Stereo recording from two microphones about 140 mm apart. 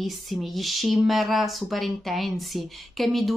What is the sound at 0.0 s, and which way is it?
A woman's voice, centre (ahead or behind).